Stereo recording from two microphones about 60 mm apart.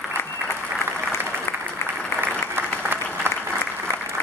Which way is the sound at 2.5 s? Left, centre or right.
Right.